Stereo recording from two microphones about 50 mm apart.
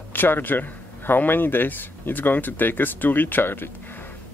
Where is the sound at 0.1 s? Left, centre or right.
Left.